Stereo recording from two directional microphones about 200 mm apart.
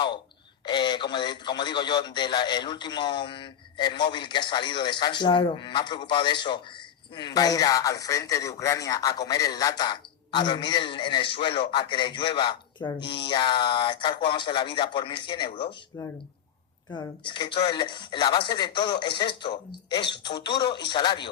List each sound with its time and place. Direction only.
0.6 s a man's voice: 20° left (ahead or behind)